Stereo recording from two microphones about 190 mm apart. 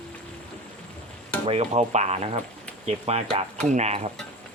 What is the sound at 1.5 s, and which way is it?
Speech, 35° right (ahead or behind).